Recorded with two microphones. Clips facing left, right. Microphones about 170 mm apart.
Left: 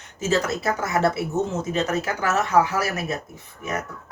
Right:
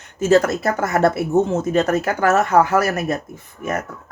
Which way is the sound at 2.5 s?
65° right (ahead or behind).